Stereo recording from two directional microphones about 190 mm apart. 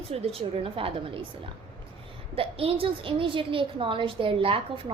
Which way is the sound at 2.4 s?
30° right (ahead or behind).